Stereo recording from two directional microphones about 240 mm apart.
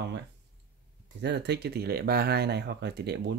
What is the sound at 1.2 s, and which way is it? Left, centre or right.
Speech, right.